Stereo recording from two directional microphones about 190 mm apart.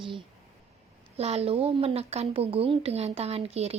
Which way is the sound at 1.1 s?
30° right (ahead or behind).